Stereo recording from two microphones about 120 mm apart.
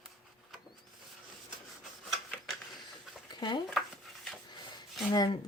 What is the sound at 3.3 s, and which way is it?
Stir, 35° left (ahead or behind).